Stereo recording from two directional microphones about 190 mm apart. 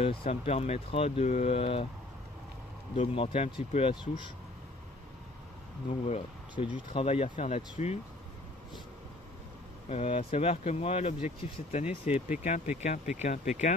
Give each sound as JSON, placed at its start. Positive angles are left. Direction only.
{"t": 0.0, "sound": "speech", "side_deg": 30}
{"t": 3.0, "sound": "speech", "side_deg": 30}
{"t": 5.9, "sound": "speech", "side_deg": 30}
{"t": 9.8, "sound": "speech", "side_deg": 35}